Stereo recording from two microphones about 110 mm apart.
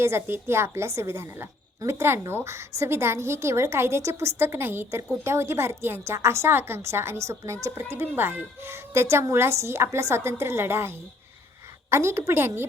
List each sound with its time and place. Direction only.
0.0 s a woman's voice: 25° right (ahead or behind)